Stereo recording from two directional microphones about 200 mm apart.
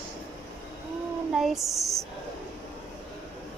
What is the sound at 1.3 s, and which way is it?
Speech, centre (ahead or behind).